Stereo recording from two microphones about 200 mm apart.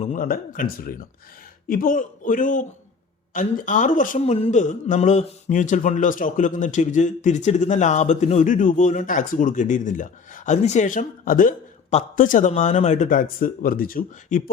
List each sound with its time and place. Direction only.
0.0 s a man's voice: 40° left (ahead or behind)